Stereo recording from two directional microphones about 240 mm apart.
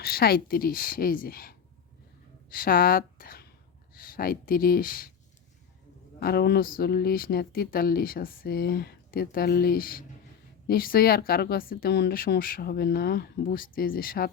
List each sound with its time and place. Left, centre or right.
0.0 s a woman's voice: left
6.1 s speech: left